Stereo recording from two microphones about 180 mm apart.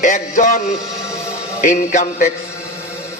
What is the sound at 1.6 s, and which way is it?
Speech, 45° left (ahead or behind).